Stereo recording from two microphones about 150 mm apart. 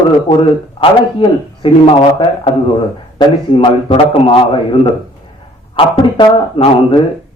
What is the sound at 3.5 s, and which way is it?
A man's voice, 35° left (ahead or behind).